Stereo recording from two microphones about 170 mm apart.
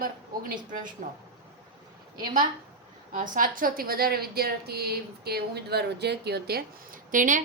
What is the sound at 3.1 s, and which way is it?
A woman's voice, 50° right (ahead or behind).